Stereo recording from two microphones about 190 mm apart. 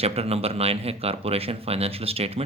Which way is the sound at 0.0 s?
30° right (ahead or behind).